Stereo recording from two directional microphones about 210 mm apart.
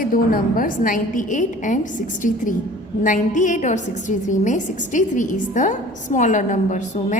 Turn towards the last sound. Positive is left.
turn(degrees=35)  # may be behind; listen again after turning